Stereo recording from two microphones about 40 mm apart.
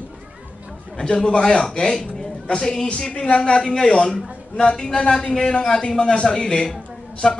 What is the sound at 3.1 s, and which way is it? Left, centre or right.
Speech, left.